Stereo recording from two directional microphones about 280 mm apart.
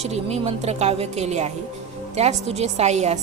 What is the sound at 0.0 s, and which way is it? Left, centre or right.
A woman's voice, right.